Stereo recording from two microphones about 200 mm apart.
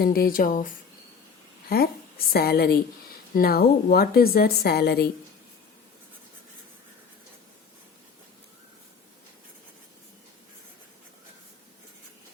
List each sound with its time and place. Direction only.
0.0 s a woman's voice: 50° left (ahead or behind)
1.7 s a woman's voice: 50° left (ahead or behind)